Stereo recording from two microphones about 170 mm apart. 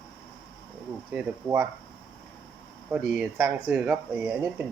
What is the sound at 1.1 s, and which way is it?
Speech, 10° right (ahead or behind).